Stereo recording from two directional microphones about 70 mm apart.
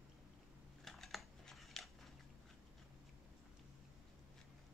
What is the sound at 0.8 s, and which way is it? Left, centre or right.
Typing, centre.